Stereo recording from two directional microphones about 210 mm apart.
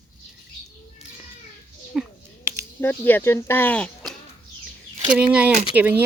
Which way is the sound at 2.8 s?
10° left (ahead or behind).